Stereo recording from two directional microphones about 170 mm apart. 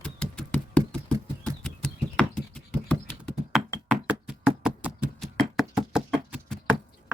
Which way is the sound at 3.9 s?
5° right (ahead or behind).